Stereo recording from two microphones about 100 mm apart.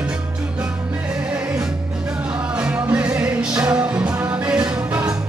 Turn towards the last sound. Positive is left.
turn(degrees=-15)  # may be behind; listen again after turning